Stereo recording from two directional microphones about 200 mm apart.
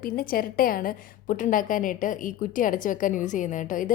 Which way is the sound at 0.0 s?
45° left (ahead or behind).